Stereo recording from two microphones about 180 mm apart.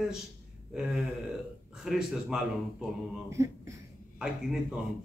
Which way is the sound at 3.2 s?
15° right (ahead or behind).